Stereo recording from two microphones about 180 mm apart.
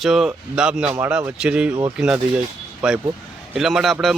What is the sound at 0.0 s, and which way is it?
A man's voice, centre (ahead or behind).